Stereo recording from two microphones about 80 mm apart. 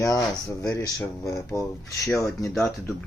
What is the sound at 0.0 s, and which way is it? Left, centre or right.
Speech, left.